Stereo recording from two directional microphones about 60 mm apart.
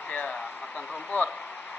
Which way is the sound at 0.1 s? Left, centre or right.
Left.